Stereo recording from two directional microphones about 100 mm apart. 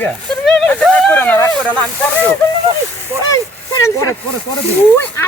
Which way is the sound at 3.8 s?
35° left (ahead or behind).